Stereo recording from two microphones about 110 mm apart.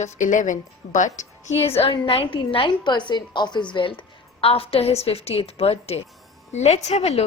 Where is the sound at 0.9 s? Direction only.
90° left.